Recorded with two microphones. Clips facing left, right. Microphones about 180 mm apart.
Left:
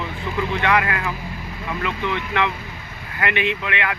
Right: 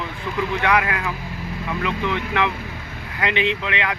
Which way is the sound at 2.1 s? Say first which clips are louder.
Left 1 dB; 15° right (ahead or behind).